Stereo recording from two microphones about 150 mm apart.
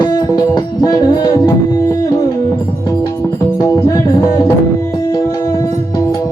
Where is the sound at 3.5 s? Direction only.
25° left (ahead or behind).